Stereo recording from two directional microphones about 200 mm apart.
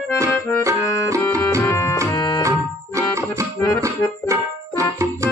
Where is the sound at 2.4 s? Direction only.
15° right (ahead or behind).